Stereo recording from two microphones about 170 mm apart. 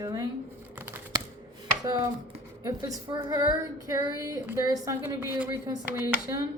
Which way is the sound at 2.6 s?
20° right (ahead or behind).